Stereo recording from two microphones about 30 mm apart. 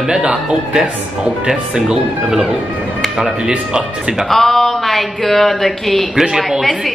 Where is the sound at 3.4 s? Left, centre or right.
Right.